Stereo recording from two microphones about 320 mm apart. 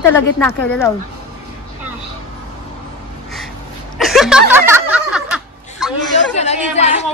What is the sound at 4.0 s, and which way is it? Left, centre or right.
Snicker, centre.